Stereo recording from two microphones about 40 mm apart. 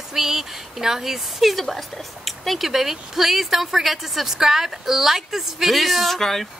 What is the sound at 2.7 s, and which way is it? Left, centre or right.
A woman's voice, centre.